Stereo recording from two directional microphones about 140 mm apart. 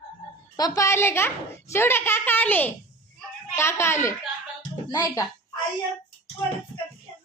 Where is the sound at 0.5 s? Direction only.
25° left (ahead or behind).